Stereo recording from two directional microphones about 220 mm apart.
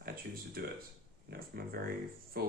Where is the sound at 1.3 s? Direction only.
45° right (ahead or behind).